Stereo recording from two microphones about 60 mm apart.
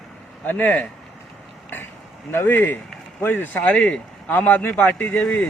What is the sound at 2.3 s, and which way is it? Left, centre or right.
Speech, left.